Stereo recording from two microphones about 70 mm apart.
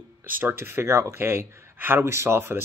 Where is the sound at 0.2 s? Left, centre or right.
Right.